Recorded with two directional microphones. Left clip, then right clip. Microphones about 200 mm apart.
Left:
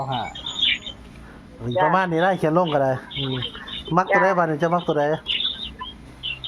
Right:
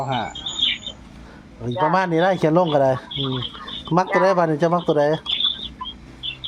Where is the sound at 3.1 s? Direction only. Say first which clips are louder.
Right 2 dB; 15° left (ahead or behind).